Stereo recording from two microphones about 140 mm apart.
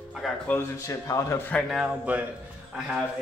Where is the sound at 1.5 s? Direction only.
Centre (ahead or behind).